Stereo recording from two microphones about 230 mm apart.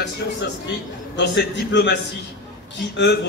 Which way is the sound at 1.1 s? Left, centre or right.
Left.